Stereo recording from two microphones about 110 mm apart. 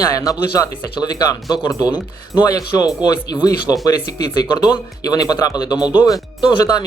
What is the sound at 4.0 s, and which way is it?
Speech, 40° left (ahead or behind).